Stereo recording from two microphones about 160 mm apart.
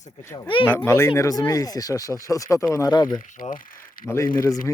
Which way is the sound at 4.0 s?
65° left (ahead or behind).